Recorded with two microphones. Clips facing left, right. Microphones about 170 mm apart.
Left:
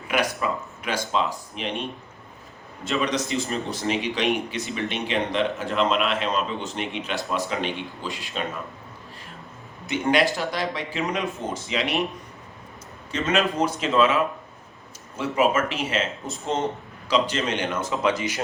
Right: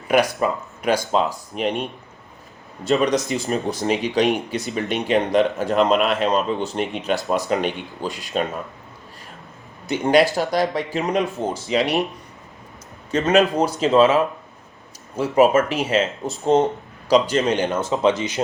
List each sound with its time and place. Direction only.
0.1 s speech: 40° right (ahead or behind)
2.8 s speech: 40° right (ahead or behind)
9.9 s speech: 40° right (ahead or behind)
13.1 s speech: 40° right (ahead or behind); by 18.3 s 25° right (ahead or behind)